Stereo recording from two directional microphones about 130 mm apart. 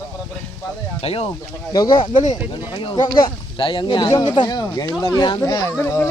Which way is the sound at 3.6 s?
40° left (ahead or behind).